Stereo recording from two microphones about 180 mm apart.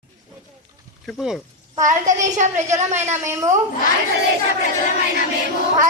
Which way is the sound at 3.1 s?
15° right (ahead or behind).